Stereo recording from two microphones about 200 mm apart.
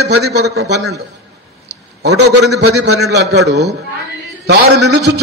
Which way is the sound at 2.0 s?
55° right (ahead or behind).